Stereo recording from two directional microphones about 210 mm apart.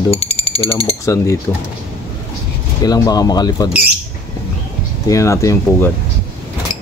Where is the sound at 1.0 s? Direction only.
15° left (ahead or behind).